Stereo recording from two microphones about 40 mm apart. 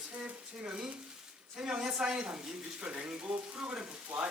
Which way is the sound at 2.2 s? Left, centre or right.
Right.